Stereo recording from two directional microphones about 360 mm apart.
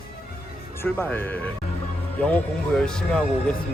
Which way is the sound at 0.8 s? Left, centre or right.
Centre.